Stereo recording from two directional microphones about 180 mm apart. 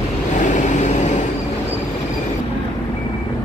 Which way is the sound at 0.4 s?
45° left (ahead or behind).